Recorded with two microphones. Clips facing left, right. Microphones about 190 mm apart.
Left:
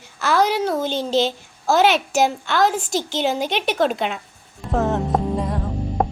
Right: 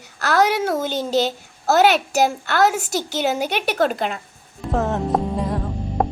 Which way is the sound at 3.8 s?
Centre (ahead or behind).